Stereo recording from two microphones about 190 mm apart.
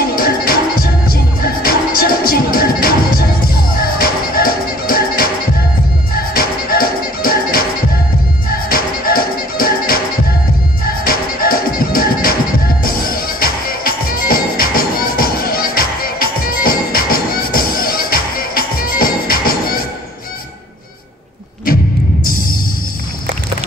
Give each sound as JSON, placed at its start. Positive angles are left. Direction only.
{"t": 0.1, "sound": "music", "side_deg": 50}
{"t": 6.3, "sound": "music", "side_deg": 50}
{"t": 22.2, "sound": "music", "side_deg": 50}